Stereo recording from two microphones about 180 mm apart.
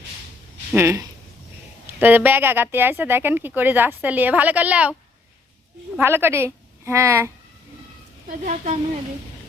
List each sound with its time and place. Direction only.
0.7 s speech: 15° right (ahead or behind)
6.0 s a woman's voice: 15° right (ahead or behind)
8.4 s a woman's voice: 40° right (ahead or behind)